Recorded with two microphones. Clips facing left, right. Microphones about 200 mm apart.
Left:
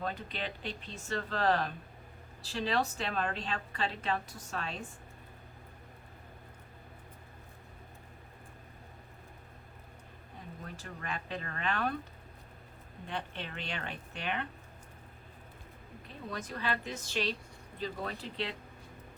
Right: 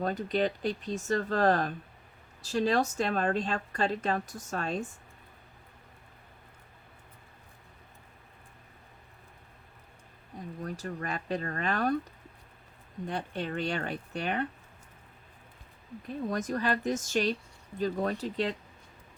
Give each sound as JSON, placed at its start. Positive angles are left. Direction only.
{"t": 0.0, "sound": "a woman's voice", "side_deg": -45}
{"t": 10.6, "sound": "speech", "side_deg": -40}
{"t": 13.1, "sound": "speech", "side_deg": -40}
{"t": 16.0, "sound": "a woman's voice", "side_deg": -45}